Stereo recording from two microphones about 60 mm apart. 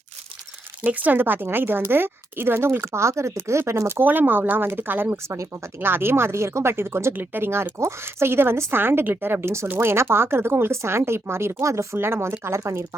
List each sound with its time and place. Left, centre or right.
0.8 s a woman's voice: right
4.0 s a woman's voice: right
5.1 s a woman's voice: right